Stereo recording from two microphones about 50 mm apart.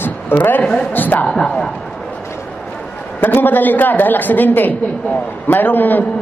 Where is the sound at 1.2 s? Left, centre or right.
Centre.